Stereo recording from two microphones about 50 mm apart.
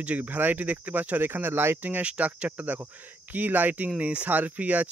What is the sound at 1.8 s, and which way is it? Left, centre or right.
Speech, right.